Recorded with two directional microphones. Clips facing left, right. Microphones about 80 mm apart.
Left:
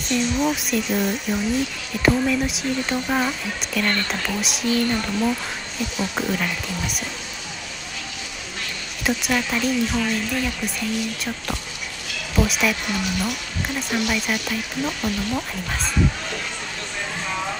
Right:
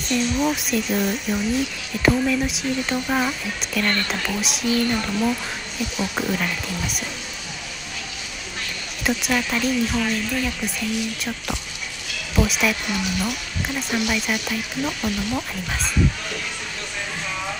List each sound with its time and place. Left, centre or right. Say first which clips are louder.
0.1 s speech: even; centre
9.0 s speech: even; centre